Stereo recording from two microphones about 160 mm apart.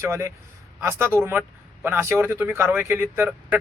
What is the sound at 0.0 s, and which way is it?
Speech, 15° right (ahead or behind).